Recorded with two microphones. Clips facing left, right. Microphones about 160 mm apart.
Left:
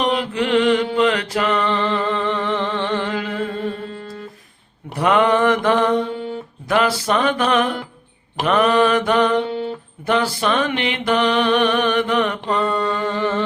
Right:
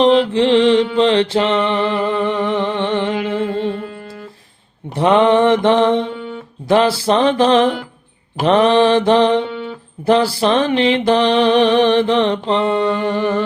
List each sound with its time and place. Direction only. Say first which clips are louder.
0.0 s mantra: right 8 dB; 30° right (ahead or behind)
4.9 s mantra: right 4 dB; 25° right (ahead or behind)